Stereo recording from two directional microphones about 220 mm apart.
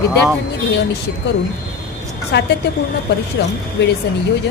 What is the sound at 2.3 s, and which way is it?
Speech, 50° left (ahead or behind).